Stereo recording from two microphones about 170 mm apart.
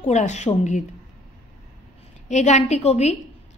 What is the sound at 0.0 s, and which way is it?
Speech, 45° left (ahead or behind).